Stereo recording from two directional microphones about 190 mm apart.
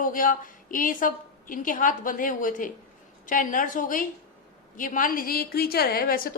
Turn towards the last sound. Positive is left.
turn(degrees=50)  # may be behind; listen again after turning